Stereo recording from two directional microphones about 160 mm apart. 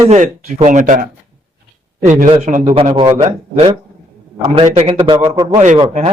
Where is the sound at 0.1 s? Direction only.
45° right (ahead or behind).